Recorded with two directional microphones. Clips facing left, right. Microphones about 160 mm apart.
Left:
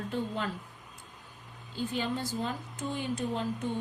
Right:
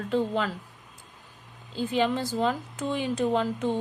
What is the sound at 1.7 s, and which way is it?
A woman's voice, 90° right.